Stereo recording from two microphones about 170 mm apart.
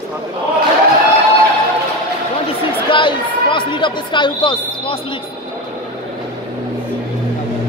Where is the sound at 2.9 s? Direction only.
30° left (ahead or behind).